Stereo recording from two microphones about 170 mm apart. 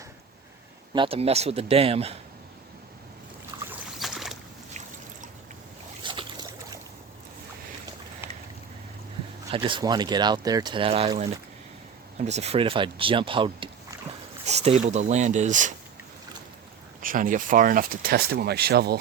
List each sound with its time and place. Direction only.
0.9 s speech: 35° right (ahead or behind)
3.7 s boat: centre (ahead or behind)
6.0 s boat: 30° right (ahead or behind)
9.5 s speech: 30° right (ahead or behind)
12.2 s speech: 40° right (ahead or behind)
17.0 s speech: 55° right (ahead or behind); by 18.9 s 70° right (ahead or behind)